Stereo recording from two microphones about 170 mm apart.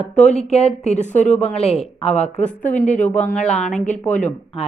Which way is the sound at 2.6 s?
45° left (ahead or behind).